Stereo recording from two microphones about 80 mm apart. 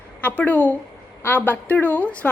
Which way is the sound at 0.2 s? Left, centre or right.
Centre.